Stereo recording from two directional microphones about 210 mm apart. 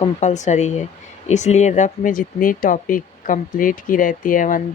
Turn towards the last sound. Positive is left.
turn(degrees=40)  # may be behind; listen again after turning